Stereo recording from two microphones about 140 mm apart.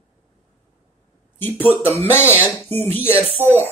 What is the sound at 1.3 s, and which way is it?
Speech, 15° left (ahead or behind).